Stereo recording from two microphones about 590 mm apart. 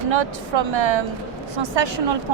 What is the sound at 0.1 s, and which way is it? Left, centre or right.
Speech, right.